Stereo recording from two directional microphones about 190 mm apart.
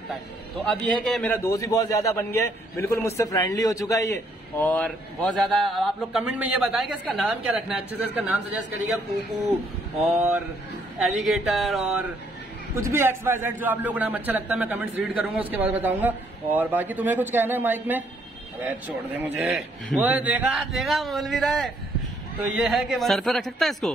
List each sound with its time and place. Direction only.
0.7 s a man's voice: 5° left (ahead or behind)
11.0 s a man's voice: centre (ahead or behind)
12.7 s a man's voice: 15° right (ahead or behind)